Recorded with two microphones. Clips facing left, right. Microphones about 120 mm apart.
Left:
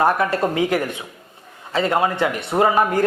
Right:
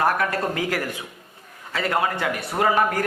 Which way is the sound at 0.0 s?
25° left (ahead or behind).